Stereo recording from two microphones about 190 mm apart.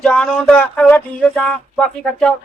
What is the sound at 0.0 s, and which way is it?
Speech, 5° left (ahead or behind).